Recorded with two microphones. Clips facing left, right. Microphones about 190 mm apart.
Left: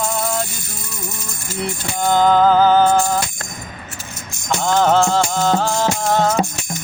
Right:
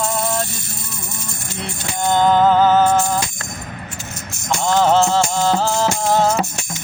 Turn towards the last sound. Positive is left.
turn(degrees=-5)  # may be behind; listen again after turning